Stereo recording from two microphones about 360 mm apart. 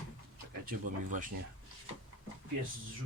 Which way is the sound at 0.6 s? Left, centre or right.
Right.